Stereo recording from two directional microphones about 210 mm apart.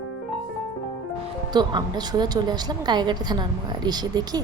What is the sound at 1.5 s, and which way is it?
A woman's voice, 20° right (ahead or behind).